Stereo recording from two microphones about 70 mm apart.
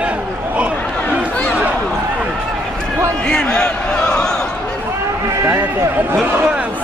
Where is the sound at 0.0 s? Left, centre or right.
Centre.